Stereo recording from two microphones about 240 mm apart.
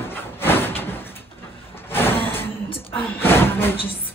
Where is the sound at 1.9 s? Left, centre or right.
Centre.